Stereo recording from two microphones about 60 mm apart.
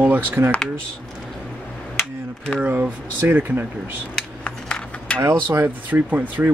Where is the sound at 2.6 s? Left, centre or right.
Right.